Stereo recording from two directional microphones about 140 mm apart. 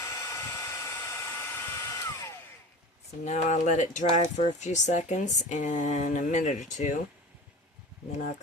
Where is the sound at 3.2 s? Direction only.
55° left (ahead or behind).